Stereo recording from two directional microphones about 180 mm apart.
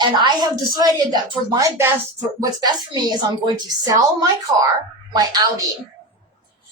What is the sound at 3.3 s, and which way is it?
Speech, 20° right (ahead or behind).